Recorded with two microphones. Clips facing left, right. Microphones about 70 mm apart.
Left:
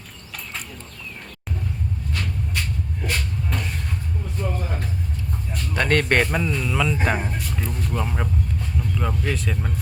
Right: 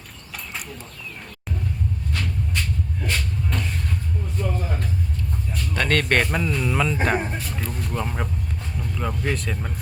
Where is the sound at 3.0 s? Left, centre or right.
Centre.